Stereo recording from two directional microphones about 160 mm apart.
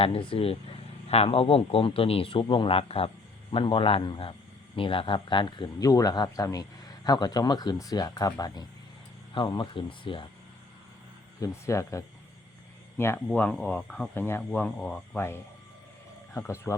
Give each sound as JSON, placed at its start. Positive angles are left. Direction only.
{"t": 0.0, "sound": "speech", "side_deg": 35}
{"t": 11.3, "sound": "speech", "side_deg": 20}